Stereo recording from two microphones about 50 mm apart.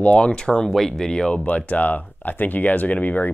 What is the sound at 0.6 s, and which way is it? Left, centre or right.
Speech, centre.